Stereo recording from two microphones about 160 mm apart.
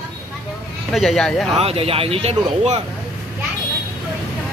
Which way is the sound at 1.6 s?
40° right (ahead or behind).